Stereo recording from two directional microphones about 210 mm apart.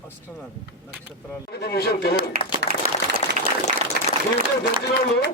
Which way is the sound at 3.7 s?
35° right (ahead or behind).